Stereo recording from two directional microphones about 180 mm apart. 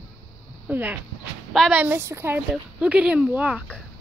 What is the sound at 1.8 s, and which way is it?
Speech, 15° right (ahead or behind).